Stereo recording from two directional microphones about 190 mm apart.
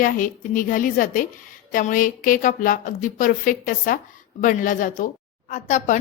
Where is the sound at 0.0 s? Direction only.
45° left (ahead or behind).